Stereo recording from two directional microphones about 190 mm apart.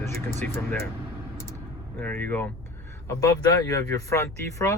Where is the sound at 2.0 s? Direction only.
10° left (ahead or behind).